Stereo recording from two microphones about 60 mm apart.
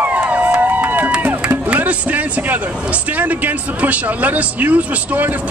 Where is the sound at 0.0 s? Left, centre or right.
Right.